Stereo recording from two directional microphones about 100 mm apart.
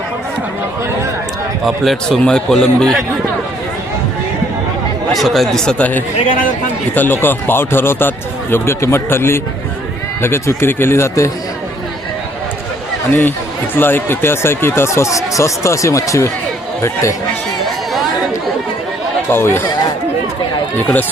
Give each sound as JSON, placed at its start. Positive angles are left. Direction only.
{"t": 1.6, "sound": "a man's voice", "side_deg": 0}
{"t": 5.1, "sound": "a man's voice", "side_deg": 0}
{"t": 13.1, "sound": "speech", "side_deg": 20}
{"t": 19.3, "sound": "speech", "side_deg": 25}